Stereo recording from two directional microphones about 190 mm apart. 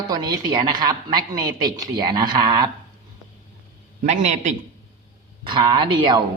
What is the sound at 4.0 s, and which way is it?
Speech, 40° right (ahead or behind).